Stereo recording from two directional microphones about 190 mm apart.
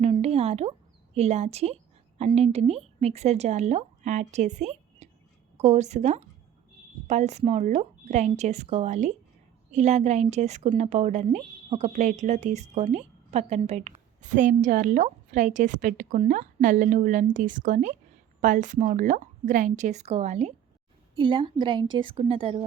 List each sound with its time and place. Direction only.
0.0 s a sound: 35° right (ahead or behind)
1.1 s a woman's voice: 35° right (ahead or behind)
21.2 s a woman's voice: 25° right (ahead or behind)